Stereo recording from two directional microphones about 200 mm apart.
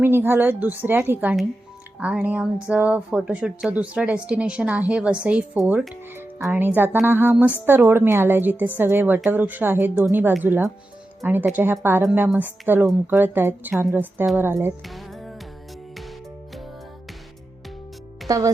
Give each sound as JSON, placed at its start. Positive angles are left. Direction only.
{"t": 0.0, "sound": "a woman's voice", "side_deg": -10}
{"t": 14.8, "sound": "music", "side_deg": 0}
{"t": 18.3, "sound": "speech", "side_deg": -15}